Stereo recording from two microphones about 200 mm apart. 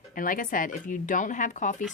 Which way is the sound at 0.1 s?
45° left (ahead or behind).